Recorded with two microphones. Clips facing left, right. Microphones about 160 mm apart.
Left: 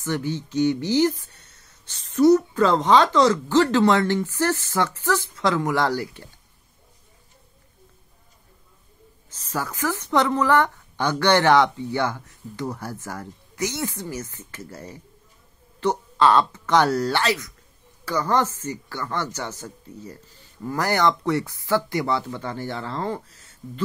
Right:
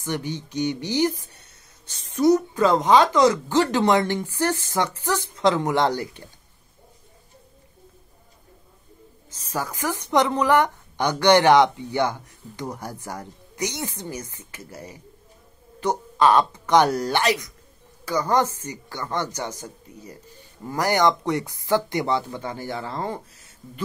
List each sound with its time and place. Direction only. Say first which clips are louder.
0.0 s a woman's voice: left 2 dB; 15° right (ahead or behind)
9.5 s a woman's voice: left 1 dB; 15° right (ahead or behind)